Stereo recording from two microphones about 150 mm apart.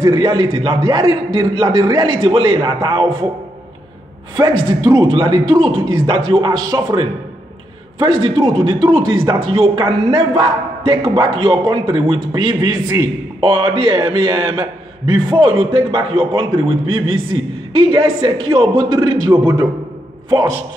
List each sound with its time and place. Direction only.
0.0 s a man's voice: 25° right (ahead or behind)
4.4 s a man's voice: 25° right (ahead or behind)
19.3 s a man's voice: 20° right (ahead or behind)